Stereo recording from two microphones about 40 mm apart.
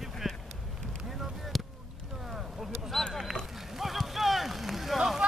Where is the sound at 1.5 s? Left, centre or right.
Centre.